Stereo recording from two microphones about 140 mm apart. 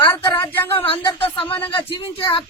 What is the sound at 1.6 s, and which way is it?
Speech, 35° left (ahead or behind).